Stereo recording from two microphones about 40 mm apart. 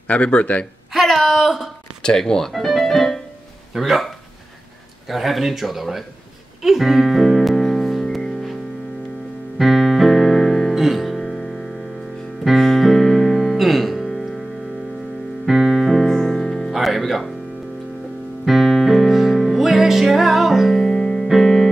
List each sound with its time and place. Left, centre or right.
0.2 s speech: left
0.9 s speech: centre
2.0 s speech: centre
2.5 s speech: centre
6.6 s music: centre
9.6 s piano: centre
10.7 s music: centre
12.5 s music: centre
15.4 s piano: centre
16.3 s music: centre
18.4 s music: centre
20.8 s music: centre